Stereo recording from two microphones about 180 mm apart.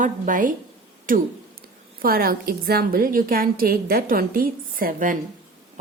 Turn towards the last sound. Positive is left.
turn(degrees=-50)  # may be behind; listen again after turning